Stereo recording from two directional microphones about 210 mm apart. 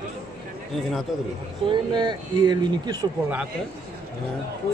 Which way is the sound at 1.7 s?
20° right (ahead or behind).